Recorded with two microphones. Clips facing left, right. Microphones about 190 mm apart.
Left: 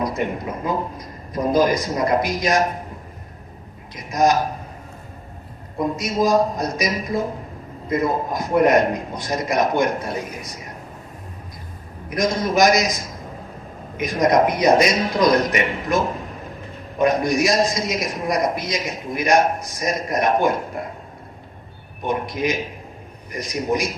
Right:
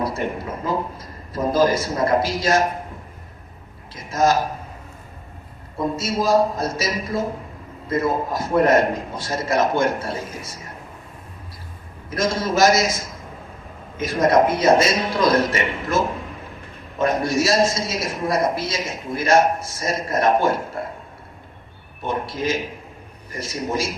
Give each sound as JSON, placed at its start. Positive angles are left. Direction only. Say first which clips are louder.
{"t": 0.6, "sound": "a man's voice", "louder": "right 1 dB", "side_deg": 15}
{"t": 3.9, "sound": "a man's voice", "louder": "left 1 dB", "side_deg": 15}
{"t": 6.0, "sound": "a man's voice", "louder": "even", "side_deg": 15}
{"t": 12.1, "sound": "a man's voice", "louder": "left 2 dB", "side_deg": 15}
{"t": 17.0, "sound": "a man's voice", "louder": "left 2 dB", "side_deg": 15}
{"t": 22.0, "sound": "a man's voice", "louder": "left 2 dB", "side_deg": 15}